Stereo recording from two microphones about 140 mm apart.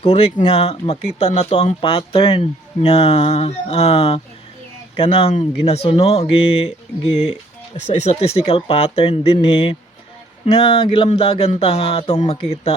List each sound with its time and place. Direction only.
0.0 s speech: 45° left (ahead or behind)